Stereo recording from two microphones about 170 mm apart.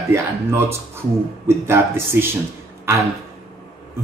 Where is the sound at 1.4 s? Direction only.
15° right (ahead or behind).